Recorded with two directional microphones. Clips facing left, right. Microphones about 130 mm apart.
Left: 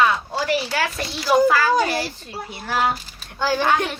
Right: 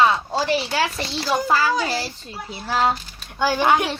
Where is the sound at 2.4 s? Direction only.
25° right (ahead or behind).